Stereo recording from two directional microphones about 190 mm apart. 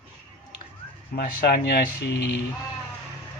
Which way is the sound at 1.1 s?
55° left (ahead or behind).